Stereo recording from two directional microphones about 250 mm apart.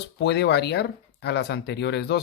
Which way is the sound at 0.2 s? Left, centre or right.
Left.